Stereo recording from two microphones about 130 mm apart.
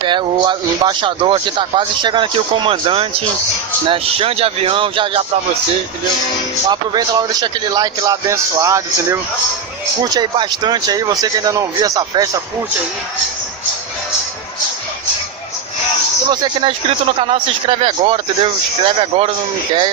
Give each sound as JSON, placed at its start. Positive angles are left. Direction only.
{"t": 0.0, "sound": "speech", "side_deg": -40}
{"t": 6.7, "sound": "speech", "side_deg": -30}
{"t": 10.0, "sound": "speech", "side_deg": -35}
{"t": 16.3, "sound": "speech", "side_deg": -35}